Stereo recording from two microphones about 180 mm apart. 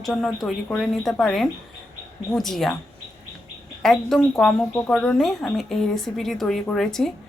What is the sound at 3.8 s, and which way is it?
Speech, centre (ahead or behind).